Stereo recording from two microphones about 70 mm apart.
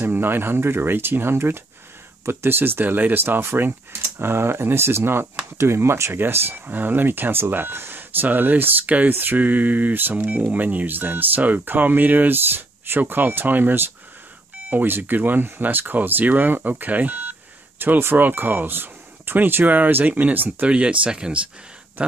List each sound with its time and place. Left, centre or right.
0.0 s speech: right; by 21.4 s centre